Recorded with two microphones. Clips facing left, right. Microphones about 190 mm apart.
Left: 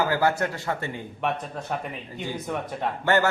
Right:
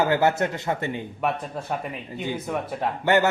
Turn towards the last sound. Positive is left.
turn(degrees=-15)  # may be behind; listen again after turning